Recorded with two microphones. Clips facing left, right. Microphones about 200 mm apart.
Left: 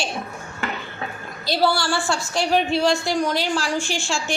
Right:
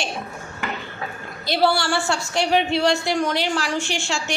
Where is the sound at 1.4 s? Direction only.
20° right (ahead or behind).